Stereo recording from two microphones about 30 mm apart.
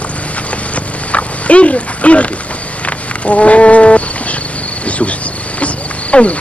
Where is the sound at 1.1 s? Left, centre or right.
Left.